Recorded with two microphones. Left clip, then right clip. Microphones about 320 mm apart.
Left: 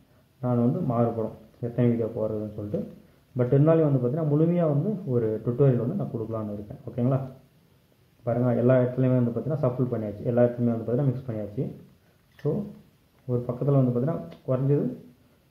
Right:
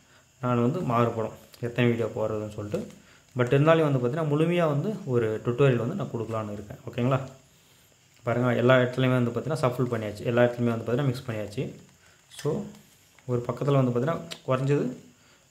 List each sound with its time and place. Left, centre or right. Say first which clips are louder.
0.4 s speech: even; right
8.2 s speech: even; right
13.3 s speech: even; right